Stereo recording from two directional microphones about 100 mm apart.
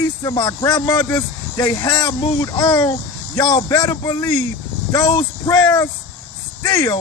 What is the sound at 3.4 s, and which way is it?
Speech, 45° left (ahead or behind).